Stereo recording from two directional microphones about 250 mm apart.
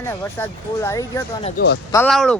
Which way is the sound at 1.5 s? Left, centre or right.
Left.